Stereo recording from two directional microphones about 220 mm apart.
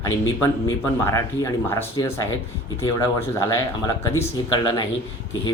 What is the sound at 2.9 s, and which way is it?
Speech, 15° left (ahead or behind).